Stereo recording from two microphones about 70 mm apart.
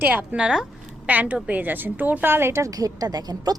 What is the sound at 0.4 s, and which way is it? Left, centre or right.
Speech, centre.